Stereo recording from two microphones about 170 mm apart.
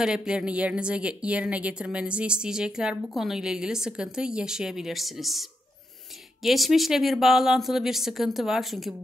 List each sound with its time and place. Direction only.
0.0 s a woman's voice: 5° right (ahead or behind)